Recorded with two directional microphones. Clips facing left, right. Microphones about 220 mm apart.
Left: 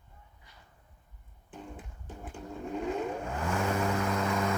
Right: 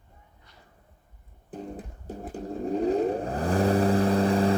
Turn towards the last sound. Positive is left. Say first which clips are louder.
# right 8 dB
turn(degrees=-35)  # may be behind; listen again after turning